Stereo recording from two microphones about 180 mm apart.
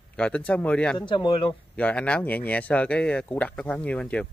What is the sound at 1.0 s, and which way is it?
Speech, 25° left (ahead or behind).